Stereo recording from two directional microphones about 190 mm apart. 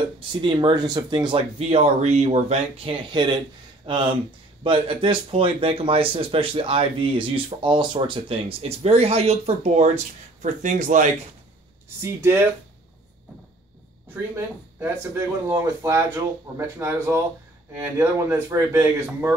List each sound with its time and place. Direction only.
0.3 s speech: 25° right (ahead or behind); by 11.1 s 40° right (ahead or behind)
12.0 s speech: 10° right (ahead or behind)
14.1 s speech: 10° right (ahead or behind)